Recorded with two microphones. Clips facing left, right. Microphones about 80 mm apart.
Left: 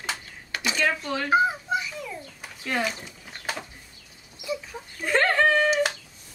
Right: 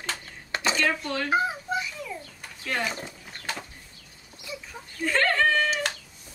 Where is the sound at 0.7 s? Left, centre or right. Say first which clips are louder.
Left 3 dB; centre.